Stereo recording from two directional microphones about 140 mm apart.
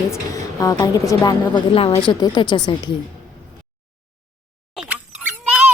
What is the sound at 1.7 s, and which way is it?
A woman's voice, 40° left (ahead or behind).